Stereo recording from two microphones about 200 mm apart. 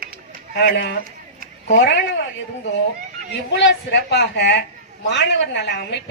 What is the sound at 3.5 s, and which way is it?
A woman's voice, 60° left (ahead or behind).